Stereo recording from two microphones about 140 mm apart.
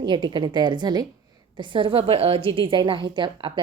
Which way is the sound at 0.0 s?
35° right (ahead or behind).